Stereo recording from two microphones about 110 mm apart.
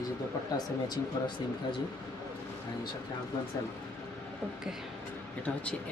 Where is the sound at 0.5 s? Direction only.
35° left (ahead or behind).